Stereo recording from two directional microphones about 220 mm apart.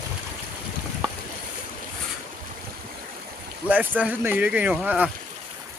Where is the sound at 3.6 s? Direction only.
5° right (ahead or behind).